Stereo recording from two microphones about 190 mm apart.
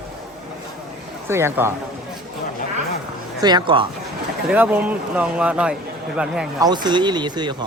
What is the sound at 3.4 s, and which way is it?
Speech, 25° right (ahead or behind).